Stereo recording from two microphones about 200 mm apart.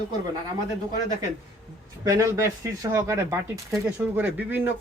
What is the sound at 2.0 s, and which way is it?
Speech, 15° right (ahead or behind).